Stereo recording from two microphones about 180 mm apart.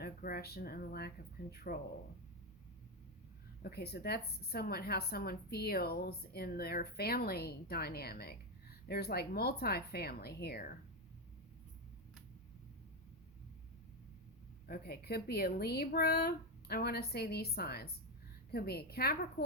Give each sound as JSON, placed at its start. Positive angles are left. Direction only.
{"t": 0.0, "sound": "a woman's voice", "side_deg": 55}
{"t": 3.6, "sound": "a woman's voice", "side_deg": 60}
{"t": 14.7, "sound": "a woman's voice", "side_deg": 60}